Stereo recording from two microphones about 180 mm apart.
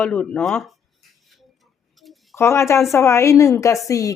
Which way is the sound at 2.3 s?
15° left (ahead or behind).